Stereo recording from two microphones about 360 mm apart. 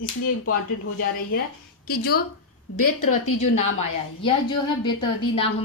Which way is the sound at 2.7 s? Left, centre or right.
Left.